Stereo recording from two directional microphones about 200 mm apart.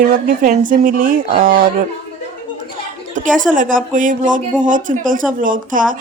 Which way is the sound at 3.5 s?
40° right (ahead or behind).